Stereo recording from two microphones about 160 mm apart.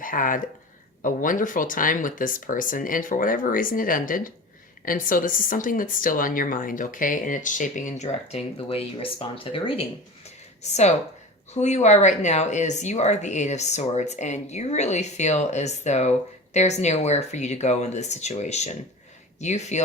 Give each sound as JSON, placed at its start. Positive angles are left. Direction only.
{"t": 0.0, "sound": "speech", "side_deg": 60}